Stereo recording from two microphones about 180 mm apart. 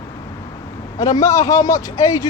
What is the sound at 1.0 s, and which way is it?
Speech, 20° left (ahead or behind).